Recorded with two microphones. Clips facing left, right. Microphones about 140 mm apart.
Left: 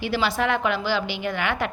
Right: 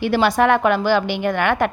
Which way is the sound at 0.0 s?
50° right (ahead or behind).